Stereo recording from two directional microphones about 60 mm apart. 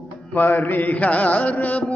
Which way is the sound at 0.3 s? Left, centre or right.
Left.